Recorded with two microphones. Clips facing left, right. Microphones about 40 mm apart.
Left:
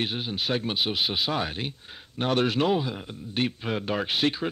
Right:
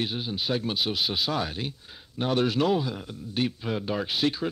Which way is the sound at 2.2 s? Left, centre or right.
Left.